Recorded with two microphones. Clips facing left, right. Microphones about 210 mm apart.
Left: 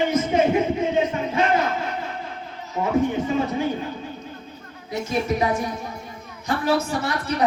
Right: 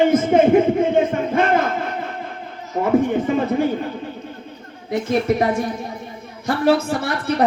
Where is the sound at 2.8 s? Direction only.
55° right (ahead or behind).